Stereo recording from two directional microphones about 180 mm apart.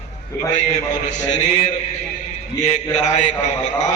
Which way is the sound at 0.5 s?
40° left (ahead or behind).